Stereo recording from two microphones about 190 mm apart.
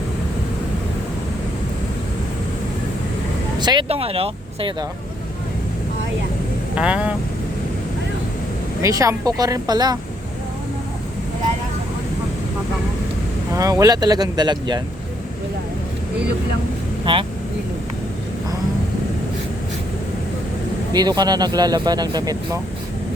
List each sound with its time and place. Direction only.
3.6 s speech: 25° right (ahead or behind)
6.7 s speech: 5° right (ahead or behind)
8.8 s speech: 15° right (ahead or behind)
13.5 s speech: 15° right (ahead or behind)
17.1 s speech: 25° right (ahead or behind)
20.9 s speech: 20° right (ahead or behind)